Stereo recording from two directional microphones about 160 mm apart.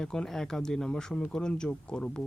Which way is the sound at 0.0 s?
5° left (ahead or behind).